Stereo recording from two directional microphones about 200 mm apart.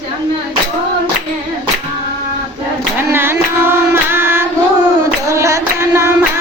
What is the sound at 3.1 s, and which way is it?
Carnatic music, 10° right (ahead or behind).